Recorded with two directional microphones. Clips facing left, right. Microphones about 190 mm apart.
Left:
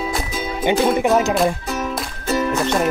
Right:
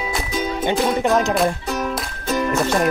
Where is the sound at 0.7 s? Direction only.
5° left (ahead or behind).